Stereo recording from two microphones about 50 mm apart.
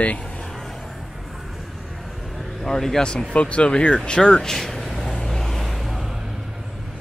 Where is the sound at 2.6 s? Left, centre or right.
Centre.